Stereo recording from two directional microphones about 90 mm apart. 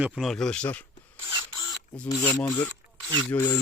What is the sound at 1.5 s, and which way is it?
Mechanisms, 50° left (ahead or behind).